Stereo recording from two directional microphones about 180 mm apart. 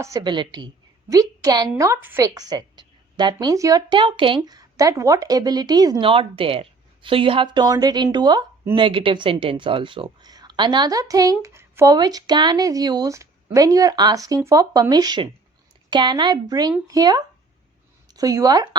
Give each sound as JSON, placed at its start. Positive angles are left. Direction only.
{"t": 0.0, "sound": "a woman's voice", "side_deg": -20}